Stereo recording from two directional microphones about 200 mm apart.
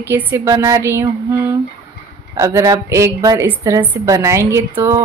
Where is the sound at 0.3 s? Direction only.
15° right (ahead or behind).